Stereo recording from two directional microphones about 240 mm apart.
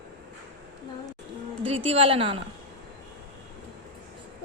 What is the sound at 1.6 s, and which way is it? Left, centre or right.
Speech, right.